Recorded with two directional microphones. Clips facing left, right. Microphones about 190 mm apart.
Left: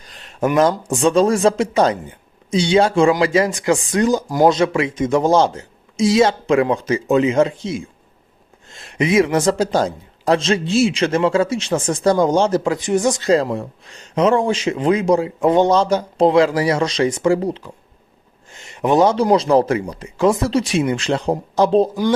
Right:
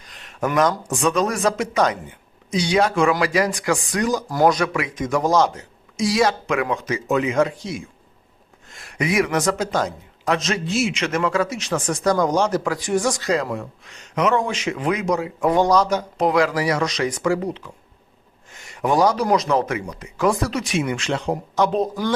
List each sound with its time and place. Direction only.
0.0 s a man's voice: 30° left (ahead or behind)